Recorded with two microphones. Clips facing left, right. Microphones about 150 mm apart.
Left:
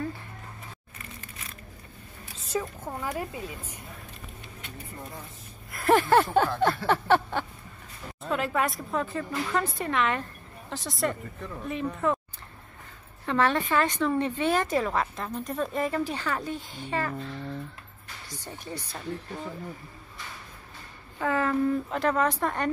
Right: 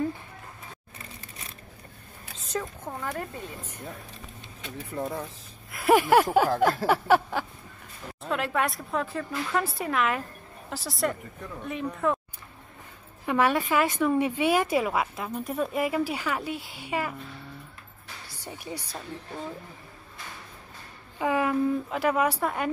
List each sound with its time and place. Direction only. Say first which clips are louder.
2.5 s speech: left 1 dB; 5° left (ahead or behind)
4.9 s speech: right 11 dB; 90° right
5.7 s speech: right 1 dB; 5° right (ahead or behind)
13.2 s speech: right 1 dB; 10° right (ahead or behind)
18.4 s speech: right 2 dB; 10° right (ahead or behind)
21.2 s speech: right 1 dB; 10° right (ahead or behind)